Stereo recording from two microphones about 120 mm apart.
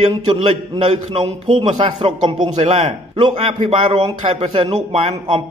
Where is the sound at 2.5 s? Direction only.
70° right (ahead or behind).